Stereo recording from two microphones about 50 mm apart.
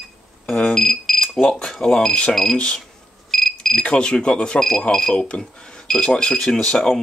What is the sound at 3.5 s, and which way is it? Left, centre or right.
Speech, centre.